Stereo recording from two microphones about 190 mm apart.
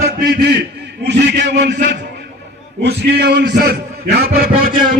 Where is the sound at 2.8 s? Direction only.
60° right (ahead or behind).